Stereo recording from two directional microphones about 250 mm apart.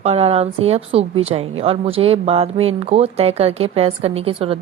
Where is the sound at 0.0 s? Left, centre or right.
Right.